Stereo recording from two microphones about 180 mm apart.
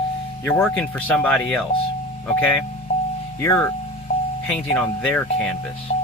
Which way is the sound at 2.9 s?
35° left (ahead or behind).